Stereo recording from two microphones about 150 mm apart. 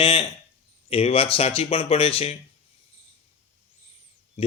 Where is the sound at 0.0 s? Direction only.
35° left (ahead or behind).